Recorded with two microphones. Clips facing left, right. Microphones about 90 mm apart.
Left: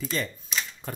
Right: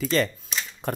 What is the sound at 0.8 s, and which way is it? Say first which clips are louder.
Speech: right 8 dB; 65° right (ahead or behind).